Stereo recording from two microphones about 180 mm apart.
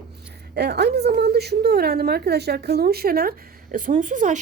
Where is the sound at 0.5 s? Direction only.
65° right (ahead or behind).